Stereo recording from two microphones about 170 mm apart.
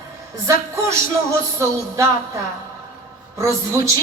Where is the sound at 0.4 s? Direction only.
15° right (ahead or behind).